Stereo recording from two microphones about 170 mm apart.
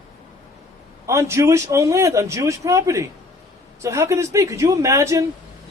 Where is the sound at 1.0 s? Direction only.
15° right (ahead or behind).